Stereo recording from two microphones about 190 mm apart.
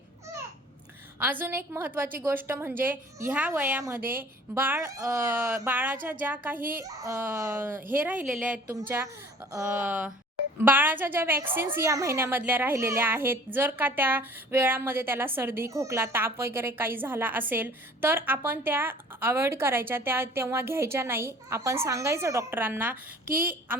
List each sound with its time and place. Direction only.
1.2 s a woman's voice: 10° right (ahead or behind)
23.2 s a woman's voice: 50° right (ahead or behind)